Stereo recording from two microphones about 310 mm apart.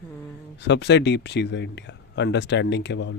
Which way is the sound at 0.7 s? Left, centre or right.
Left.